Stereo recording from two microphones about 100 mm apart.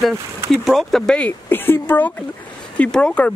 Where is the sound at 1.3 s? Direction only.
20° left (ahead or behind).